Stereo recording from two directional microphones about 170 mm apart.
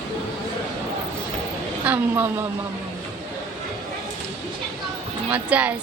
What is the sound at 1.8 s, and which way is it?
Speech, 10° right (ahead or behind).